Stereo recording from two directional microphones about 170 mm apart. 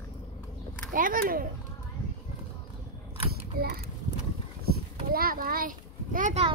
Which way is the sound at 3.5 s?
65° right (ahead or behind).